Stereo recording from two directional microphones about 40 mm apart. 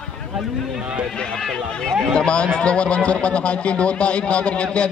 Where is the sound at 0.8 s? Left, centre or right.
Right.